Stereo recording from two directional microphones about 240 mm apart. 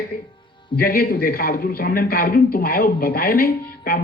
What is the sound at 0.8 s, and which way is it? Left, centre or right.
A man's voice, left.